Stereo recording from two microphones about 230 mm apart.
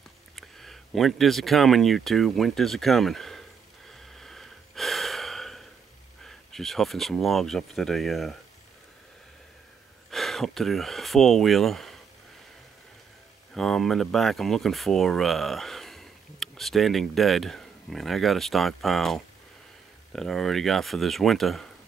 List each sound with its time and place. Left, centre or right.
0.4 s speech: centre
3.9 s gasp: centre
6.2 s speech: centre
10.1 s speech: centre
13.6 s speech: centre